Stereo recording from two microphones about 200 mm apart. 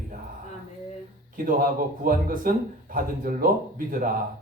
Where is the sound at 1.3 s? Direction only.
45° right (ahead or behind).